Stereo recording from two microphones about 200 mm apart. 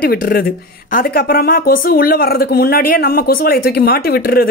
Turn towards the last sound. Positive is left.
turn(degrees=50)  # may be behind; listen again after turning